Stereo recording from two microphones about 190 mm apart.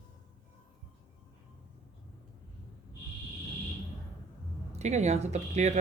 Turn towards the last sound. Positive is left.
turn(degrees=-35)  # may be behind; listen again after turning